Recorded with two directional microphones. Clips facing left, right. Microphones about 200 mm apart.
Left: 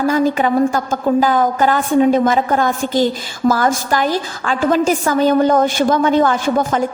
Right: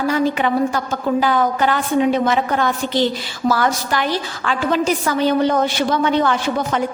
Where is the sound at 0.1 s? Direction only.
45° left (ahead or behind).